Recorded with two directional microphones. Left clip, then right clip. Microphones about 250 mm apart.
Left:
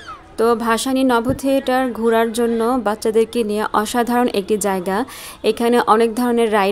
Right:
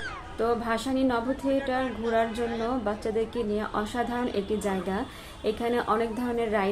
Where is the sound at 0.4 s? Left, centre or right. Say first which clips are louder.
Left 11 dB; left.